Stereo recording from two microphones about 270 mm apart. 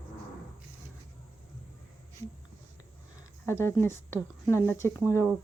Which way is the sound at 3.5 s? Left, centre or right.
Centre.